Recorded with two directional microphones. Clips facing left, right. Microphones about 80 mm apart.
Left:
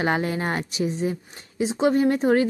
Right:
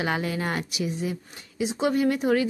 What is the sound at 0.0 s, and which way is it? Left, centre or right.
Speech, left.